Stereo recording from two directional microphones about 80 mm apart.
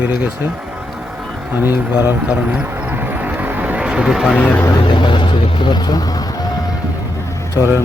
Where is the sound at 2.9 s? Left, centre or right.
Right; by 4.3 s centre.